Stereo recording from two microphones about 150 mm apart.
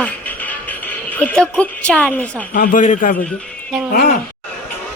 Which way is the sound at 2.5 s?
65° left (ahead or behind).